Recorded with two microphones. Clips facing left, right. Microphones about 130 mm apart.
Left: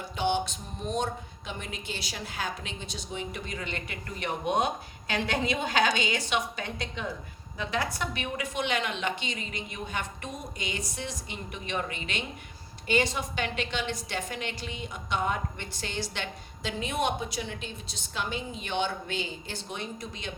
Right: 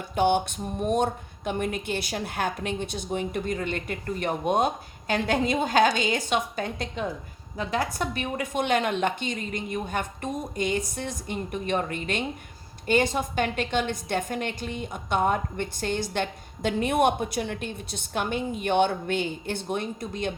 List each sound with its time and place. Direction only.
0.2 s a woman's voice: 55° right (ahead or behind)